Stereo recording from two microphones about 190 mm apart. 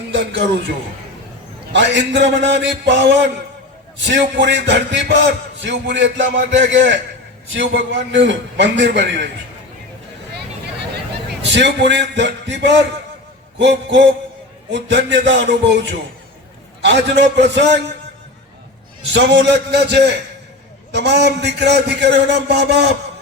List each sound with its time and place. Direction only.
0.2 s a man's voice: 65° right (ahead or behind)
1.7 s a man's voice: 70° right (ahead or behind)
11.5 s a man's voice: 65° right (ahead or behind)
19.1 s a man's voice: 65° right (ahead or behind)